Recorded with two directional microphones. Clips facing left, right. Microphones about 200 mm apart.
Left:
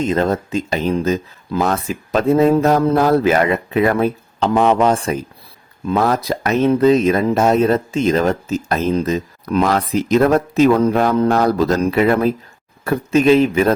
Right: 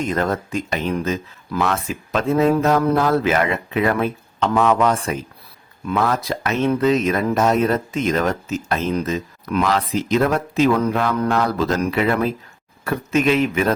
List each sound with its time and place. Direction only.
0.0 s speech: 25° left (ahead or behind)